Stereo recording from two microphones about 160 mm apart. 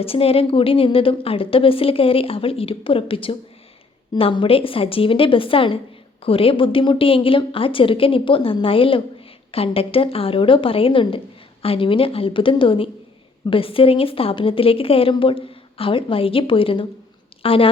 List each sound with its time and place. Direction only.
0.0 s a woman's voice: 35° left (ahead or behind)